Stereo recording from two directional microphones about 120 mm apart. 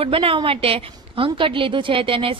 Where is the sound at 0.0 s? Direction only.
50° right (ahead or behind).